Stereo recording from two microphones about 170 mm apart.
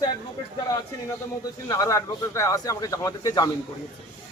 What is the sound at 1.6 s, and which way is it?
A man's voice, 20° left (ahead or behind).